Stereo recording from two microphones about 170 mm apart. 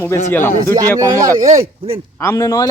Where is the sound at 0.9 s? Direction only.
20° right (ahead or behind).